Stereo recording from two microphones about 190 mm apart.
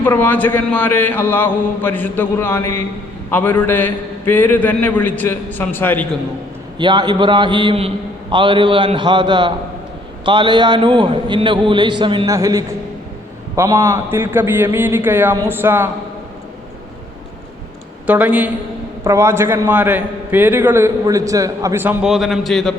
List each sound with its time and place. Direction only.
0.0 s a man's voice: 10° left (ahead or behind)
6.7 s a man's voice: 25° right (ahead or behind)
18.0 s a man's voice: 5° right (ahead or behind)